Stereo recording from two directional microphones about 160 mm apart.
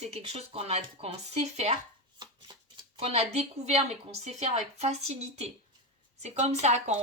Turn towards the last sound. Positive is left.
turn(degrees=-45)  # may be behind; listen again after turning